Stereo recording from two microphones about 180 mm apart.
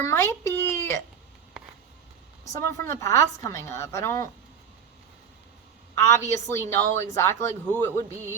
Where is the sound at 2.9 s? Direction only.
15° left (ahead or behind).